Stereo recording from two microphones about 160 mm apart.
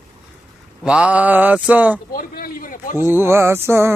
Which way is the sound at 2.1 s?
65° left (ahead or behind).